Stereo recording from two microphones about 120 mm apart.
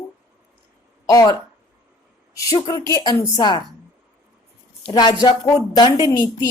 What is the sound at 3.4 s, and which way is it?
Speech, 40° left (ahead or behind).